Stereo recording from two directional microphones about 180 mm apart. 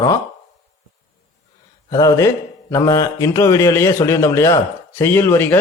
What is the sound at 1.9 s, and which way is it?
A man's voice, 20° left (ahead or behind).